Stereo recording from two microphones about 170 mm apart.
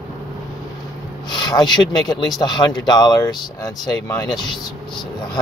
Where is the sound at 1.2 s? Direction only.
25° left (ahead or behind).